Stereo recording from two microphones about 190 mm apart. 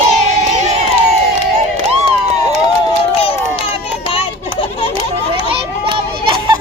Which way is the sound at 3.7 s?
30° left (ahead or behind).